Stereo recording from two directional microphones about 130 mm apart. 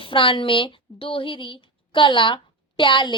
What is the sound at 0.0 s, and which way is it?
A woman's voice, 40° left (ahead or behind).